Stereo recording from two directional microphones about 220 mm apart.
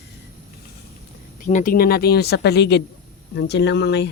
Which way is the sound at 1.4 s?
40° left (ahead or behind).